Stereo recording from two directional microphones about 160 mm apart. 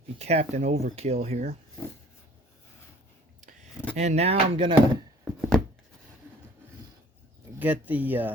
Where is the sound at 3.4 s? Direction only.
50° right (ahead or behind).